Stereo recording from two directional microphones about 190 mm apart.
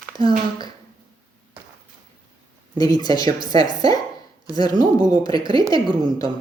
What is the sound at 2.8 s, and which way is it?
Speech, 20° left (ahead or behind).